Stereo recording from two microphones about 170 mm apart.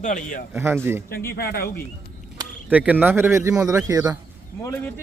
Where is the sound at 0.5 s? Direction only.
15° right (ahead or behind).